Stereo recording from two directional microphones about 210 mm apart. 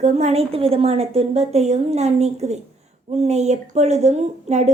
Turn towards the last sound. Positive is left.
turn(degrees=-30)  # may be behind; listen again after turning